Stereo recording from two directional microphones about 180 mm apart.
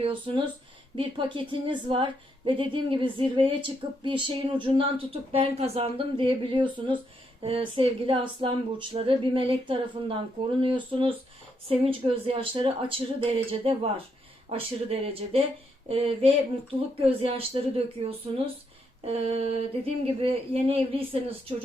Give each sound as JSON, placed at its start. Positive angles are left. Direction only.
{"t": 0.0, "sound": "a woman's voice", "side_deg": -30}